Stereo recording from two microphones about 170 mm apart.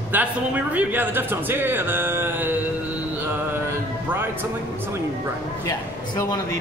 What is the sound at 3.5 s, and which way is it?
Music, 15° right (ahead or behind).